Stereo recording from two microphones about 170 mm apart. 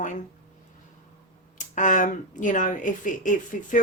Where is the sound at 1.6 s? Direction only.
50° left (ahead or behind).